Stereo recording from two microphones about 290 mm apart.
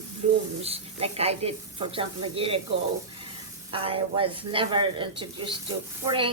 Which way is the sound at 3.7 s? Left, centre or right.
Centre.